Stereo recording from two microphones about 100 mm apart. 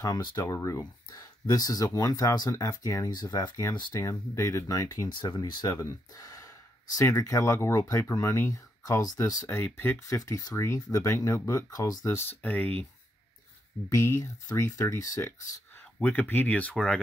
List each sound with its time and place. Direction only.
0.0 s speech: 45° left (ahead or behind)
0.5 s speech: 35° left (ahead or behind)
3.1 s speech: 40° left (ahead or behind)
4.0 s speech: 30° left (ahead or behind)
5.1 s speech: 45° left (ahead or behind)
9.5 s speech: 20° left (ahead or behind)
10.0 s speech: 35° left (ahead or behind)
12.3 s speech: 15° left (ahead or behind)
13.8 s speech: 30° left (ahead or behind)
16.0 s speech: 20° left (ahead or behind)